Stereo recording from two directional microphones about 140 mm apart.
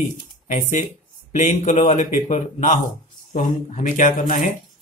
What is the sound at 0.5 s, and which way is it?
Speech, 60° left (ahead or behind).